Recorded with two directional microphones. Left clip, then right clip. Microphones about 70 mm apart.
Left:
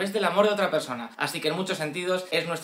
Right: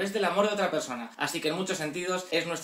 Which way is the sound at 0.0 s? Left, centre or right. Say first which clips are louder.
Left 4 dB; left.